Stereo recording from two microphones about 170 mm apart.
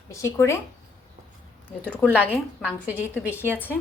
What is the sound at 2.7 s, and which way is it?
Speech, 10° right (ahead or behind).